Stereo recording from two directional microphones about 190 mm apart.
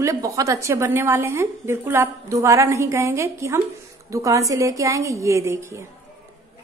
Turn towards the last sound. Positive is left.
turn(degrees=-15)  # may be behind; listen again after turning